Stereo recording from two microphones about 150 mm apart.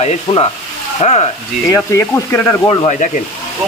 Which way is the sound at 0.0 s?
45° left (ahead or behind).